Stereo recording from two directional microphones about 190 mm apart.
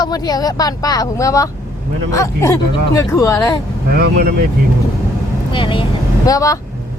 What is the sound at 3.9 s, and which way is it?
Speech, 55° right (ahead or behind).